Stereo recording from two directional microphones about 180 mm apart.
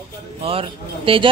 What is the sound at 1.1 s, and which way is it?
Speech, 30° right (ahead or behind).